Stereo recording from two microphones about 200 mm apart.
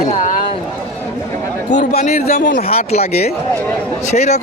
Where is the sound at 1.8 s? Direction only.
50° left (ahead or behind).